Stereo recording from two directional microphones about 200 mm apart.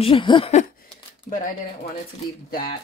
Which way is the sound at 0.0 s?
25° left (ahead or behind).